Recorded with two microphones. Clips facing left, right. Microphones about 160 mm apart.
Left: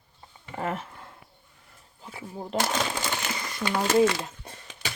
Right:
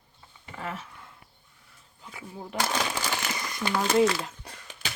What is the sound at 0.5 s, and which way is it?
Speech, 50° left (ahead or behind).